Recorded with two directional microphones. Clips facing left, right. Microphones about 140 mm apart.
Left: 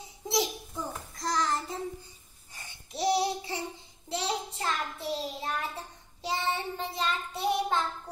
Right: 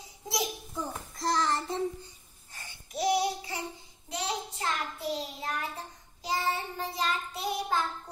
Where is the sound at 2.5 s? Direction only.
20° left (ahead or behind).